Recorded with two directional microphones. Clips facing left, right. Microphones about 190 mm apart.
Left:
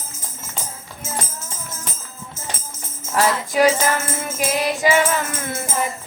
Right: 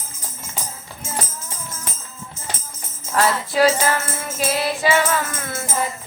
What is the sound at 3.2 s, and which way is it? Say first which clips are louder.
Jingle bell: even; 15° left (ahead or behind).